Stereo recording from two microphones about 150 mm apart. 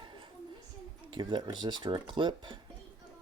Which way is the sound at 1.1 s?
30° right (ahead or behind).